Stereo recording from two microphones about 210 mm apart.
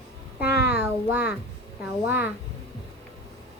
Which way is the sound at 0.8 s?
10° right (ahead or behind).